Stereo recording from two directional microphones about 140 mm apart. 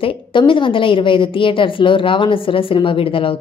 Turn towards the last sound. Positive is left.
turn(degrees=40)  # may be behind; listen again after turning